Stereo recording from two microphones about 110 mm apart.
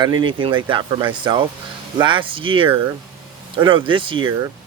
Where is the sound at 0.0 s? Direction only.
45° right (ahead or behind).